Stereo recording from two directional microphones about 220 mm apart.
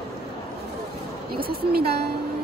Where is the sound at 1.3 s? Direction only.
45° right (ahead or behind).